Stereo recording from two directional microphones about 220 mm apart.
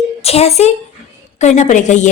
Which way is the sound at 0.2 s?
30° left (ahead or behind).